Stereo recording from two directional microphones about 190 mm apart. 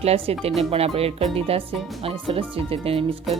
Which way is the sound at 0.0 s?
30° right (ahead or behind).